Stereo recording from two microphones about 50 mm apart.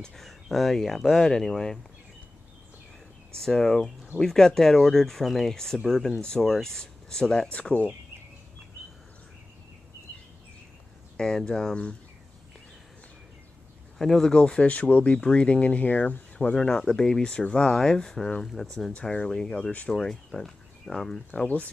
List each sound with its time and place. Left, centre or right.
0.1 s speech: centre
1.2 s speech: centre
3.3 s speech: centre
11.1 s speech: centre
13.9 s speech: centre
14.4 s speech: left
14.7 s speech: left
16.3 s speech: centre
19.0 s speech: centre